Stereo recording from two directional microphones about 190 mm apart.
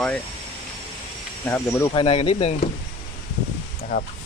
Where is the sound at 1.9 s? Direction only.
30° left (ahead or behind).